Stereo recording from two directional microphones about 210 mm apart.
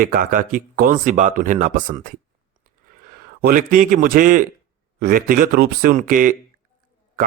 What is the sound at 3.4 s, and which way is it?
Speech, 40° right (ahead or behind).